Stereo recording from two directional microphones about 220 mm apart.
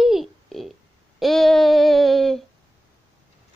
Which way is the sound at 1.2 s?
Centre (ahead or behind).